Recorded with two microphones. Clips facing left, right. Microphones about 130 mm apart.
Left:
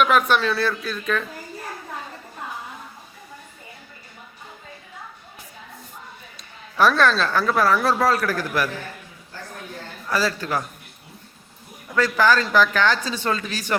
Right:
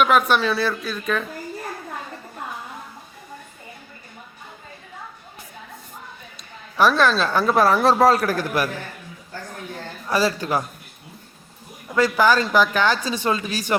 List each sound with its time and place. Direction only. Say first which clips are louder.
0.0 s speech: right 1 dB; 5° right (ahead or behind)
6.7 s speech: right 1 dB; 5° right (ahead or behind)
7.3 s a man's voice: right 2 dB; 20° right (ahead or behind)
10.1 s speech: right 3 dB; 15° right (ahead or behind)
11.9 s speech: right 1 dB; 10° right (ahead or behind)